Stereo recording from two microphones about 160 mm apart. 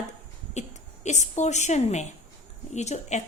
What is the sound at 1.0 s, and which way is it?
A woman's voice, 45° left (ahead or behind).